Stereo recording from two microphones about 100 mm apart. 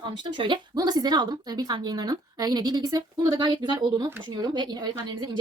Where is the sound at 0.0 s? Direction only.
50° right (ahead or behind).